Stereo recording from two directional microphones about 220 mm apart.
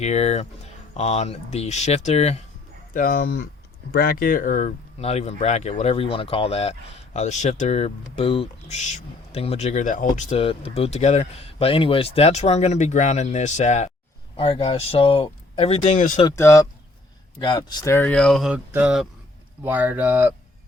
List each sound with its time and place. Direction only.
0.0 s speech: 30° left (ahead or behind)
2.9 s speech: 40° left (ahead or behind)
16.1 s speech: 15° left (ahead or behind); by 20.3 s 10° right (ahead or behind)